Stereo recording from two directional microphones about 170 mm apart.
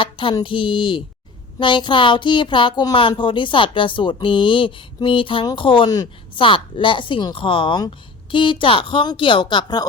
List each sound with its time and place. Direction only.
0.0 s speech: 30° left (ahead or behind)